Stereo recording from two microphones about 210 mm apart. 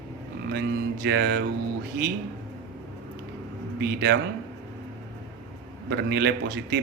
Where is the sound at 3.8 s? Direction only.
50° right (ahead or behind).